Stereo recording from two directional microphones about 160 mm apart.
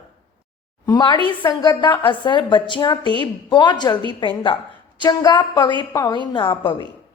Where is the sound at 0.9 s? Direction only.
25° left (ahead or behind).